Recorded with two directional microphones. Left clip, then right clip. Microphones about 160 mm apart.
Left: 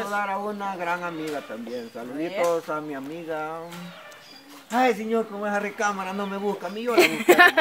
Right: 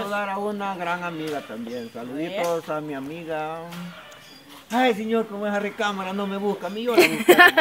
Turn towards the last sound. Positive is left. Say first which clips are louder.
# right 2 dB
turn(degrees=0)  # may be behind; listen again after turning